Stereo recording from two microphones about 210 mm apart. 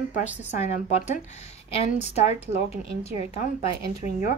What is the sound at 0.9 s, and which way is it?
A woman's voice, 30° left (ahead or behind).